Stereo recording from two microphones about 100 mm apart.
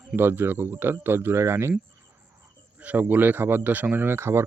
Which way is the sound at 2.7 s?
15° right (ahead or behind).